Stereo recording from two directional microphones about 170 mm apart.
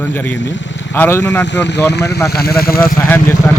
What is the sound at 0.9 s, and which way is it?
Speech, 15° left (ahead or behind).